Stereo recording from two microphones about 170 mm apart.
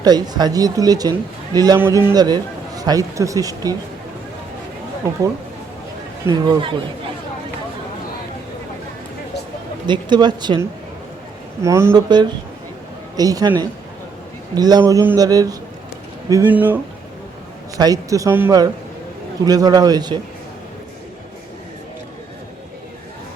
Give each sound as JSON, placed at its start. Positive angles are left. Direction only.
{"t": 0.0, "sound": "a man's voice", "side_deg": -25}
{"t": 6.2, "sound": "a man's voice", "side_deg": -25}
{"t": 9.8, "sound": "a man's voice", "side_deg": -25}
{"t": 14.5, "sound": "a man's voice", "side_deg": -25}
{"t": 16.3, "sound": "speech", "side_deg": -10}
{"t": 17.7, "sound": "a man's voice", "side_deg": -20}